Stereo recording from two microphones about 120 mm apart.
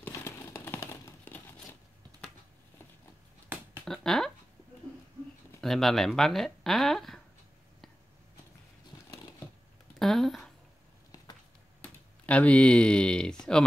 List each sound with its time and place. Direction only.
0.0 s crumpling: 15° left (ahead or behind)
3.8 s speech: 5° left (ahead or behind)
5.6 s speech: centre (ahead or behind)
9.9 s speech: centre (ahead or behind)
11.8 s speech: 10° left (ahead or behind)